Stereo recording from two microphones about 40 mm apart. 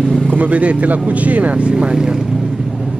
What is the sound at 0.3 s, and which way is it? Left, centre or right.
Speech, right.